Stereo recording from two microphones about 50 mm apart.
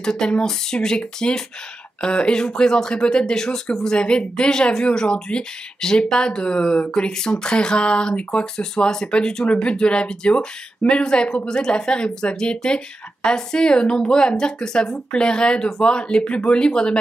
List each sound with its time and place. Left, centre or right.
0.0 s speech: centre